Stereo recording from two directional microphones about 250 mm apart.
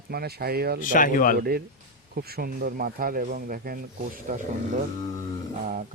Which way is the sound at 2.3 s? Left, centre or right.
Right.